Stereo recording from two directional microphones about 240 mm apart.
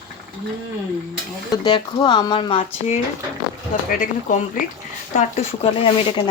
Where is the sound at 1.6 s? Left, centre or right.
Centre.